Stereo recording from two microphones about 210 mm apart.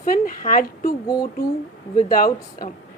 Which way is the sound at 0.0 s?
40° left (ahead or behind).